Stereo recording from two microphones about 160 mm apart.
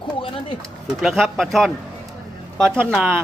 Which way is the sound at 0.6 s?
Centre (ahead or behind).